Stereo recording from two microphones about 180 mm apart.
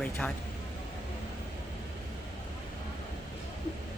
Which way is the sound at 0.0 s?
5° left (ahead or behind).